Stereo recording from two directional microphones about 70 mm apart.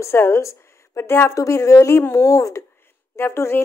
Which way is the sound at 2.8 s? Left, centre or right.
Left.